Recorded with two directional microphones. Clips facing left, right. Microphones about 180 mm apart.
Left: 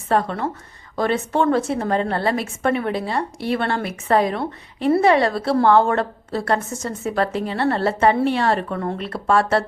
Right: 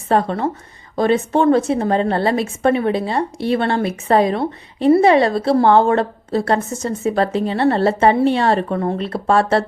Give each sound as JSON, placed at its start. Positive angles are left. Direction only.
{"t": 0.1, "sound": "a woman's voice", "side_deg": -25}